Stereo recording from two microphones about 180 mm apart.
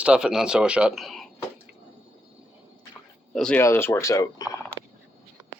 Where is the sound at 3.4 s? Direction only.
5° left (ahead or behind).